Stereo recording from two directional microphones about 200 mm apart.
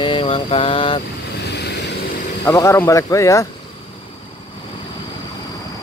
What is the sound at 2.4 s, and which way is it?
Speech, 15° left (ahead or behind).